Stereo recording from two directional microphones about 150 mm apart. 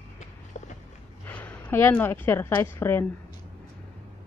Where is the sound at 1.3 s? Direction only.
10° left (ahead or behind).